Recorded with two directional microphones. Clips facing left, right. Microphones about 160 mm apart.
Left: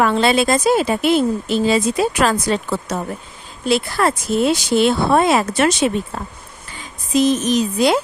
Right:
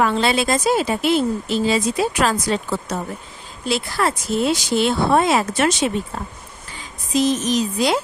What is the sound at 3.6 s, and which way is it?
A woman's voice, 55° left (ahead or behind).